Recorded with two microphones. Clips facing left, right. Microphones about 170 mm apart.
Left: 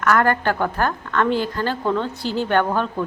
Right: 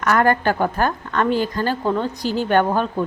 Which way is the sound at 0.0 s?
20° right (ahead or behind).